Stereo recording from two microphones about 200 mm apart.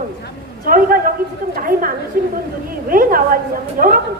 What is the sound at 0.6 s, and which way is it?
A woman's voice, 45° right (ahead or behind).